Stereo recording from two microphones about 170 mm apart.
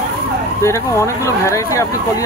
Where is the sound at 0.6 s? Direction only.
15° left (ahead or behind).